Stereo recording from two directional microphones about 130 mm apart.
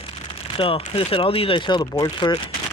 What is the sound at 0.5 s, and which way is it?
Speech, 45° left (ahead or behind).